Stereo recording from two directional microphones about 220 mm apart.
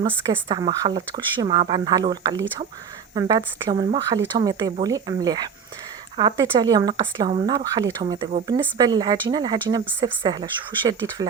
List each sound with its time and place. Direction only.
0.3 s speech: 20° right (ahead or behind)